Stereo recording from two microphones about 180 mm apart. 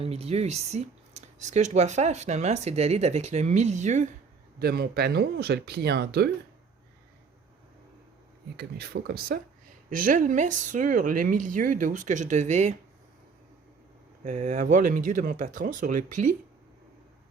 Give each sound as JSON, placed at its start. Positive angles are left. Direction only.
{"t": 0.0, "sound": "speech", "side_deg": -35}
{"t": 4.6, "sound": "speech", "side_deg": -60}
{"t": 8.5, "sound": "speech", "side_deg": -60}
{"t": 14.3, "sound": "speech", "side_deg": -40}